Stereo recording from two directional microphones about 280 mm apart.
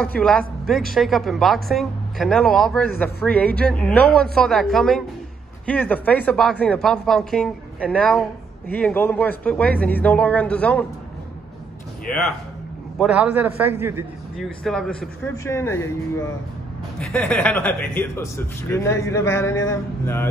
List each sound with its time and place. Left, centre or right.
0.0 s a man's voice: centre
13.0 s a man's voice: centre
17.0 s a man's voice: centre